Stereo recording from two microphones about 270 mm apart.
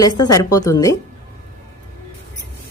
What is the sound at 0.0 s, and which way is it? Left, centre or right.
Speech, centre.